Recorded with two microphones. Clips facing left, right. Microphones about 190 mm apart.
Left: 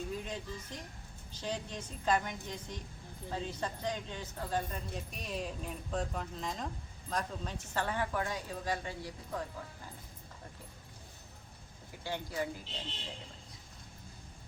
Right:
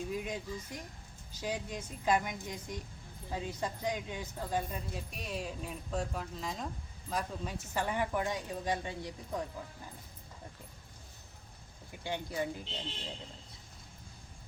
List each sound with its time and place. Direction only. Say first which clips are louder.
0.1 s speech: right 3 dB; 10° right (ahead or behind)
12.0 s speech: right 1 dB; 20° right (ahead or behind)